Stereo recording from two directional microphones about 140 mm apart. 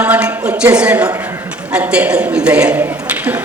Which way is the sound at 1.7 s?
10° right (ahead or behind).